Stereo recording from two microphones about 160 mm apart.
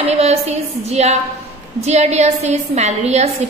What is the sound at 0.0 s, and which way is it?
A woman's voice, 40° right (ahead or behind).